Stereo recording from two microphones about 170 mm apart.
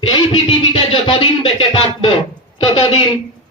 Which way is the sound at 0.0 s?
35° left (ahead or behind).